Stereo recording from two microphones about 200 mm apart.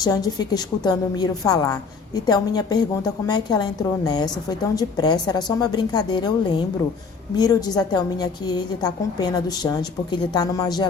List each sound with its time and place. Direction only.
0.0 s a woman's voice: 20° left (ahead or behind)